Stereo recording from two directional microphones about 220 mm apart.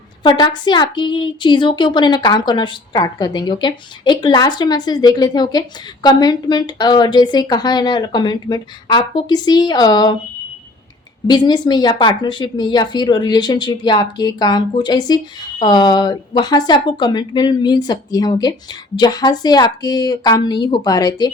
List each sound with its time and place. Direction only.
0.2 s a woman's voice: 20° left (ahead or behind)
11.3 s a woman's voice: 20° left (ahead or behind)